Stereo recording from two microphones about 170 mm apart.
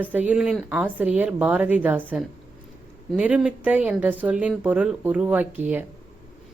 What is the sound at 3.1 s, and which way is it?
A woman's voice, 5° right (ahead or behind).